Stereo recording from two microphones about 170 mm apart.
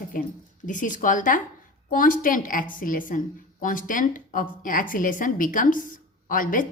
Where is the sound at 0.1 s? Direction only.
50° left (ahead or behind).